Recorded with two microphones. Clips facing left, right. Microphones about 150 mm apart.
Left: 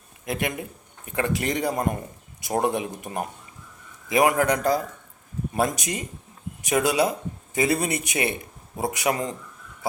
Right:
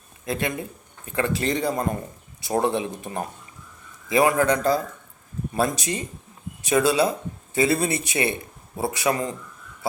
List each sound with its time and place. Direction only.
0.3 s speech: 15° left (ahead or behind)
2.7 s speech: 25° right (ahead or behind)
3.0 s speech: 15° left (ahead or behind)